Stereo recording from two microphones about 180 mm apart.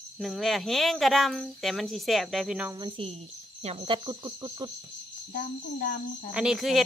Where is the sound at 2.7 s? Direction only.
25° right (ahead or behind).